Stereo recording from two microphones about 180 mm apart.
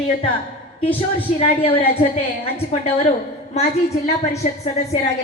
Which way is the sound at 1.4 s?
35° left (ahead or behind).